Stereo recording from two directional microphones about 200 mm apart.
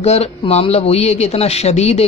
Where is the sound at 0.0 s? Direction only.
30° left (ahead or behind).